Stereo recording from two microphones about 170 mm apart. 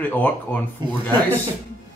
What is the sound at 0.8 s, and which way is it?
Speech, 25° right (ahead or behind).